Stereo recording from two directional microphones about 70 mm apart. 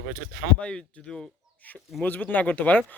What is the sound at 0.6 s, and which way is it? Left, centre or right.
Speech, centre.